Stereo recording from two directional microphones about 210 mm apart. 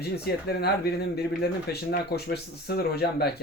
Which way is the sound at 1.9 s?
50° left (ahead or behind).